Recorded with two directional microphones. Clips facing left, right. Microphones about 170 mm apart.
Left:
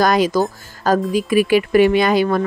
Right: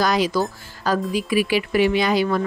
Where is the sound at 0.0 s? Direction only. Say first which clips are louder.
Left 4 dB; 50° left (ahead or behind).